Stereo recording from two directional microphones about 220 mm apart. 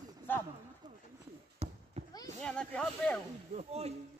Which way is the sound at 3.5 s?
30° right (ahead or behind).